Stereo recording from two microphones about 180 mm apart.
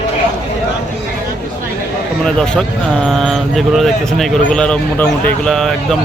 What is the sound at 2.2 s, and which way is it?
Speech, 5° left (ahead or behind).